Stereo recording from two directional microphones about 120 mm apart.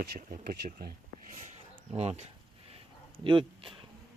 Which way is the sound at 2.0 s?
60° right (ahead or behind).